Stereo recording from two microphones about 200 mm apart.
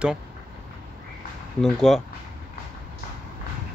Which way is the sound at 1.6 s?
Centre (ahead or behind).